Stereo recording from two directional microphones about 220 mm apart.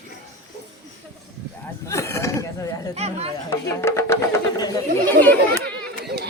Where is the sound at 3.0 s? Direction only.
30° right (ahead or behind).